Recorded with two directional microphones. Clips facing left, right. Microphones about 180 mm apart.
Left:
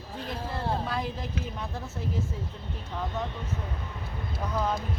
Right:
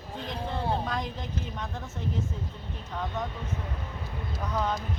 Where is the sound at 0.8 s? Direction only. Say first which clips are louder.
Left 1 dB; 5° left (ahead or behind).